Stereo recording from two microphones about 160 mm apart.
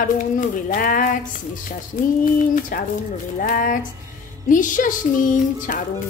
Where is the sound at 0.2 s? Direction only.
60° left (ahead or behind).